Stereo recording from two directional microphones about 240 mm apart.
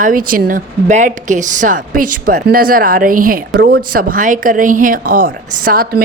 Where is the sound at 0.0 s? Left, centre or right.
Right.